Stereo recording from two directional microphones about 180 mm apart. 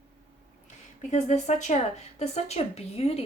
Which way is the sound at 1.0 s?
40° left (ahead or behind).